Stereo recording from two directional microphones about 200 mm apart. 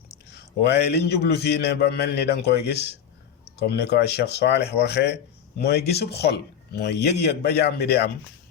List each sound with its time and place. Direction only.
0.3 s speech: 55° left (ahead or behind)